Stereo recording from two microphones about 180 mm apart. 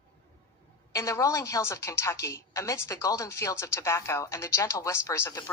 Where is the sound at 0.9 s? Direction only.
15° left (ahead or behind).